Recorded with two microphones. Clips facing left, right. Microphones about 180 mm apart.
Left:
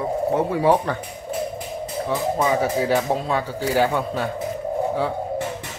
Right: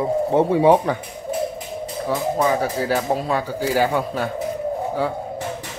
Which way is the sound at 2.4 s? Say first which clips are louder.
Left 1 dB; 5° left (ahead or behind).